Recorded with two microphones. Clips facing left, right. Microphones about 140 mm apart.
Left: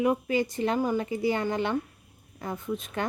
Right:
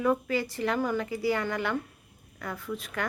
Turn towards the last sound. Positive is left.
turn(degrees=20)  # may be behind; listen again after turning